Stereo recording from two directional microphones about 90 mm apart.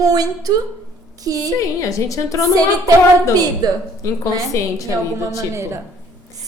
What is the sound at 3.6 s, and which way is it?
Speech, 50° right (ahead or behind).